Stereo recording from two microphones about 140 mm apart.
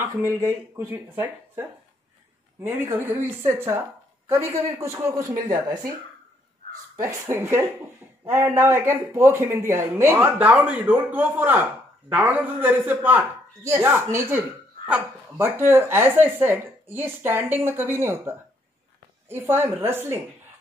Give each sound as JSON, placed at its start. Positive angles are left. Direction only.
{"t": 0.0, "sound": "a man's voice", "side_deg": -20}
{"t": 2.8, "sound": "a man's voice", "side_deg": -15}
{"t": 7.0, "sound": "speech", "side_deg": -20}